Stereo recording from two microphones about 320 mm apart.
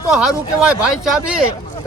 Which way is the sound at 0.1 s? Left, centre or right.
Centre.